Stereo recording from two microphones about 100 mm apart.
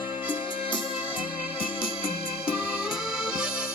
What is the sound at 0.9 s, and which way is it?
Music, 10° right (ahead or behind).